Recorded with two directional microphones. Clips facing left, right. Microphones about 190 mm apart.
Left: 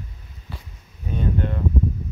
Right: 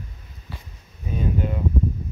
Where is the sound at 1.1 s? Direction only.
5° right (ahead or behind).